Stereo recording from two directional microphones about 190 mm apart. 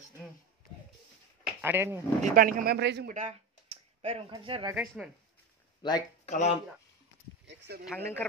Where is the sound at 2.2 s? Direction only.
45° right (ahead or behind); by 3.1 s 60° right (ahead or behind).